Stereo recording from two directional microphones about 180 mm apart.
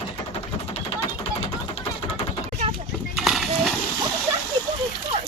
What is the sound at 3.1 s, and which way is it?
Horse, centre (ahead or behind).